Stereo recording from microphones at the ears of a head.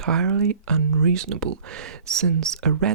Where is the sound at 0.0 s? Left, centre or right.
Right.